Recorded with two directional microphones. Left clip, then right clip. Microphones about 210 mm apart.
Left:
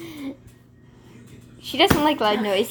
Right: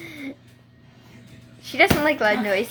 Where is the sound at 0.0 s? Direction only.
10° left (ahead or behind).